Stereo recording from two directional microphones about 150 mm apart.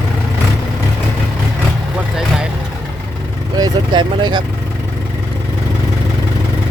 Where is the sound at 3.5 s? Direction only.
30° right (ahead or behind).